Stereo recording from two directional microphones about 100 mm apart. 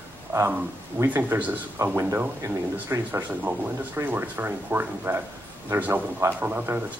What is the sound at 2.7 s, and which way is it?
Speech, 20° right (ahead or behind).